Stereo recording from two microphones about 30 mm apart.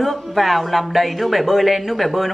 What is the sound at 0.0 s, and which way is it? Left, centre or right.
A woman's voice, centre.